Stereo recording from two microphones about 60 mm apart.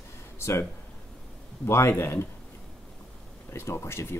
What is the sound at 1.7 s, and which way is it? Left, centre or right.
Speech, left.